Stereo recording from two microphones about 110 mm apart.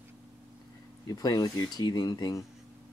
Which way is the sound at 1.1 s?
35° left (ahead or behind).